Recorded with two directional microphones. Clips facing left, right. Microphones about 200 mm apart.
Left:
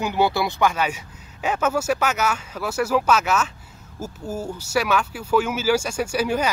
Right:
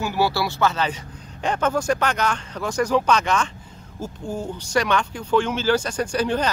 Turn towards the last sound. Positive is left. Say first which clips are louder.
# even
turn(degrees=10)  # may be behind; listen again after turning